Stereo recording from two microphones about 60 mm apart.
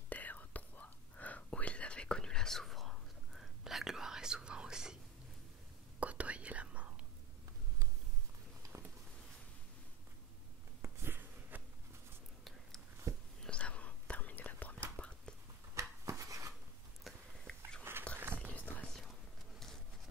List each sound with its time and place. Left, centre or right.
0.1 s whispering: left; by 4.9 s centre
5.9 s whispering: right
10.8 s a sound: right
13.1 s whispering: right
13.4 s whispering: centre
15.7 s a sound: right
17.1 s whispering: centre
17.5 s biting: centre
17.9 s wild animals: right
18.2 s whispering: right
18.5 s whispering: left